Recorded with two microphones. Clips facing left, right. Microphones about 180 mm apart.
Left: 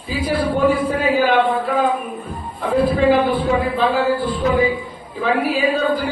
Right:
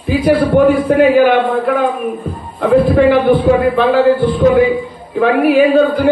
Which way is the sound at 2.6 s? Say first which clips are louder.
Right 7 dB; 65° right (ahead or behind).